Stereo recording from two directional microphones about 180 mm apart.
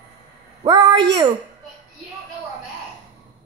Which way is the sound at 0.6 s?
25° right (ahead or behind).